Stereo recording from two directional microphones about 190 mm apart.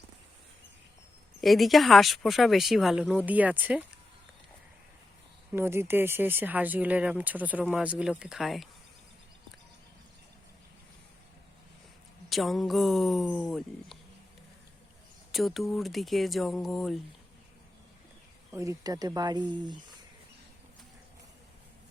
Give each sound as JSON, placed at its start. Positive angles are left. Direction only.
{"t": 1.4, "sound": "speech", "side_deg": 0}
{"t": 5.5, "sound": "speech", "side_deg": -15}
{"t": 12.3, "sound": "speech", "side_deg": 0}
{"t": 15.3, "sound": "speech", "side_deg": 0}
{"t": 18.5, "sound": "speech", "side_deg": -15}